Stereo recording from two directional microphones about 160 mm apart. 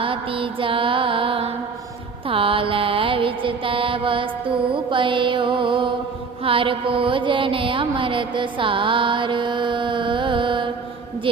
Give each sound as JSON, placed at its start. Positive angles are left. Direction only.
{"t": 0.0, "sound": "music", "side_deg": -35}
{"t": 2.2, "sound": "mantra", "side_deg": -35}